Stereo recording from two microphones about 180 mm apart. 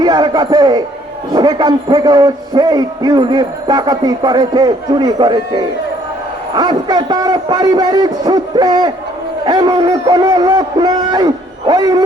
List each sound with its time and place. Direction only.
0.0 s a man's voice: 25° right (ahead or behind)